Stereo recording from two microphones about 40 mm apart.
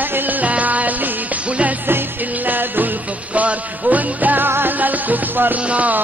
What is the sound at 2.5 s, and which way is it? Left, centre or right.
Music, right.